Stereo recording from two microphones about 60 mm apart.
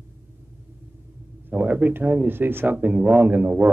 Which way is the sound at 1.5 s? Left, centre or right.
Right.